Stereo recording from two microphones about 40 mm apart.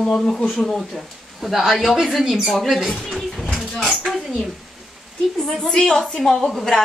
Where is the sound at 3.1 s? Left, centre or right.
Centre.